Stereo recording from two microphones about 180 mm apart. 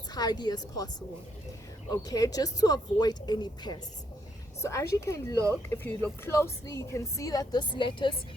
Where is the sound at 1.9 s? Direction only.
20° left (ahead or behind).